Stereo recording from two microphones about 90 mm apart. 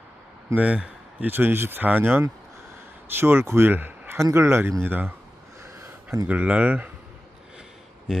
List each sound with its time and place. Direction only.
0.5 s speech: 15° right (ahead or behind)
1.3 s speech: 25° right (ahead or behind)
4.2 s speech: 35° right (ahead or behind)
6.2 s speech: 15° right (ahead or behind)
8.1 s speech: 10° right (ahead or behind)